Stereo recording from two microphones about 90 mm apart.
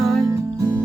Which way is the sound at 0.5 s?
35° right (ahead or behind).